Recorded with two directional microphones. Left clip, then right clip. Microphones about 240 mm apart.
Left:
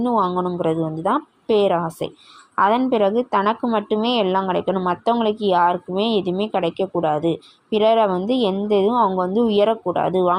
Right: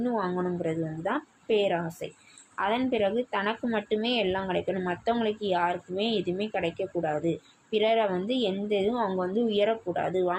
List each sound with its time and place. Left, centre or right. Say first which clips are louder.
0.0 s a woman's voice: left 10 dB; left